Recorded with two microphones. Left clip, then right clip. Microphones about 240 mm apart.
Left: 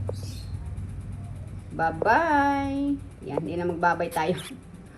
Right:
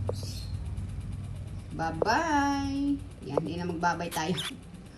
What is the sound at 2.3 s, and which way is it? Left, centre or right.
Female singing, right.